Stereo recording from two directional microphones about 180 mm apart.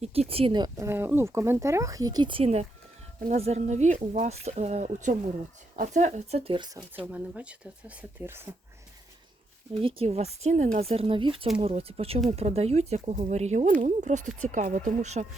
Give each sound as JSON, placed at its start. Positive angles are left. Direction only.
{"t": 0.0, "sound": "speech", "side_deg": -35}
{"t": 7.0, "sound": "speech", "side_deg": -10}
{"t": 9.8, "sound": "speech", "side_deg": -35}